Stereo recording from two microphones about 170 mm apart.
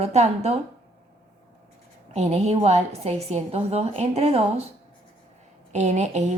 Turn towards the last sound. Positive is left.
turn(degrees=-40)  # may be behind; listen again after turning